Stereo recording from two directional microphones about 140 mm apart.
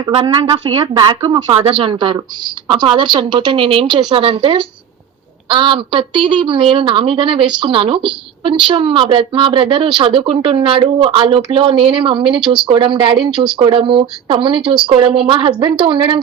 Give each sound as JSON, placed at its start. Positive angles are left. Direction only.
{"t": 0.1, "sound": "speech", "side_deg": -35}
{"t": 1.5, "sound": "speech", "side_deg": -50}
{"t": 1.8, "sound": "a woman's voice", "side_deg": -35}